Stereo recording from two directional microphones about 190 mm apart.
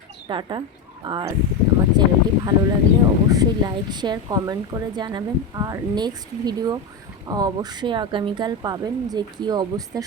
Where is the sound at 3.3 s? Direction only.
20° right (ahead or behind).